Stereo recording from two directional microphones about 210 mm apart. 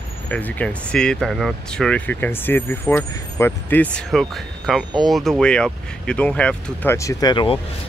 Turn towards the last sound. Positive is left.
turn(degrees=20)  # may be behind; listen again after turning